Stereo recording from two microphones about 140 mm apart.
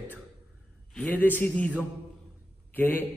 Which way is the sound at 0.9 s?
10° left (ahead or behind).